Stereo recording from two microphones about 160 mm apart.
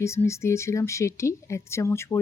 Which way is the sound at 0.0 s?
15° left (ahead or behind).